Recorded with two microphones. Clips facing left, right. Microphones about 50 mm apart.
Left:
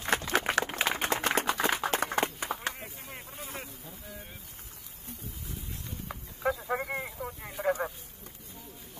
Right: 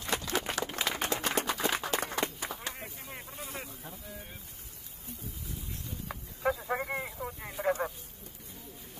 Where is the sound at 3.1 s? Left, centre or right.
Centre.